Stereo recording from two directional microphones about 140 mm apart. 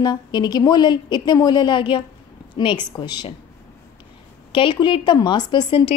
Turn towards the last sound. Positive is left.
turn(degrees=35)  # may be behind; listen again after turning